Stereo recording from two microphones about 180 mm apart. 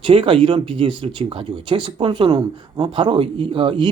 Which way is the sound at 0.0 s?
30° right (ahead or behind).